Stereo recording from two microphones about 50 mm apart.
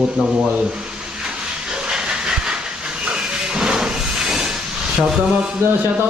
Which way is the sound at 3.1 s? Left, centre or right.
Centre.